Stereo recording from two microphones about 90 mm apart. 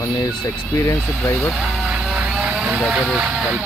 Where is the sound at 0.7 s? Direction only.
30° left (ahead or behind).